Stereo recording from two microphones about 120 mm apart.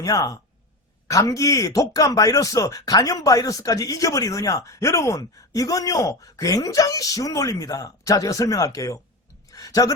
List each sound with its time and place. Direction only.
0.0 s speech: 30° left (ahead or behind)